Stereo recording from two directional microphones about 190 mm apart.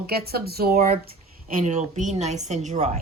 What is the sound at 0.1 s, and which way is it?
Speech, 55° right (ahead or behind).